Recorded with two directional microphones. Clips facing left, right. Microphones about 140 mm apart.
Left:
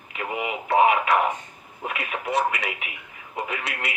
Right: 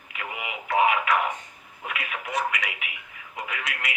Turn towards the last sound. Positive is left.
turn(degrees=30)  # may be behind; listen again after turning